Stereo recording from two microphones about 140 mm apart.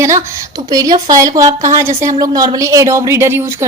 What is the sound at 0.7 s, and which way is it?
Speech, 25° right (ahead or behind).